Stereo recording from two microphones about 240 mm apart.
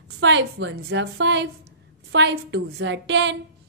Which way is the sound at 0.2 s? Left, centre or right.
Right.